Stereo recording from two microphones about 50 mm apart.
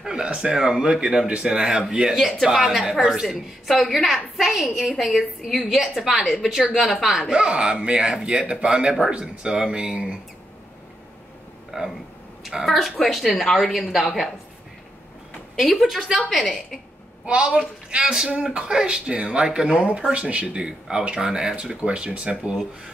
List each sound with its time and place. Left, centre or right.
0.0 s a man's voice: centre
7.2 s a man's voice: centre
11.7 s a man's voice: centre
12.6 s a woman's voice: centre
15.5 s a woman's voice: centre
17.3 s a man's voice: centre